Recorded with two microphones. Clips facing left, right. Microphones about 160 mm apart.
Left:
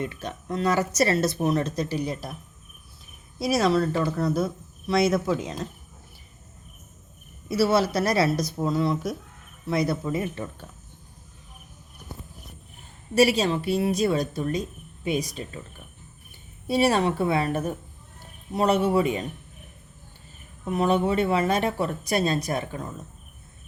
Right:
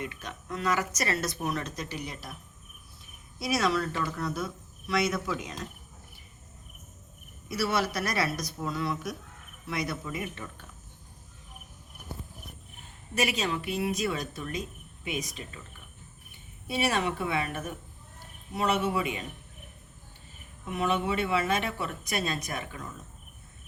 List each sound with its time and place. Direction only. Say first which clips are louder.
0.0 s speech: left 6 dB; 30° left (ahead or behind)
3.3 s speech: left 6 dB; 35° left (ahead or behind)
7.4 s a woman's voice: left 7 dB; 30° left (ahead or behind)
13.1 s speech: left 9 dB; 35° left (ahead or behind)
16.6 s speech: left 7 dB; 35° left (ahead or behind)
20.7 s speech: left 6 dB; 35° left (ahead or behind)